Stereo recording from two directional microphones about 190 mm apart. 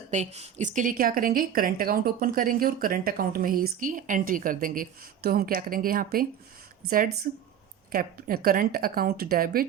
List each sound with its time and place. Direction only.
0.1 s a woman's voice: 35° right (ahead or behind)
7.3 s a woman's voice: 45° right (ahead or behind)